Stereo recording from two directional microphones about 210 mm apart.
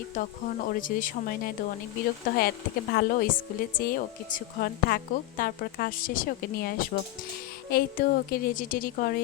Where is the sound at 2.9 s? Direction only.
45° left (ahead or behind).